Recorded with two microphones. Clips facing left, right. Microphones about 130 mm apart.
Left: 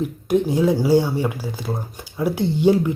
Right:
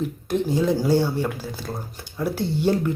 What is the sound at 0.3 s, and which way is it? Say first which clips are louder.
Speech: left 4 dB; 15° left (ahead or behind).